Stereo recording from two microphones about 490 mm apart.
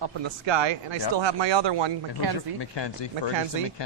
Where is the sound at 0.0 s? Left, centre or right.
Right.